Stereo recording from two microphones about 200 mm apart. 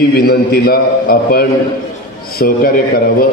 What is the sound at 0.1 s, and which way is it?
A man's voice, 50° left (ahead or behind).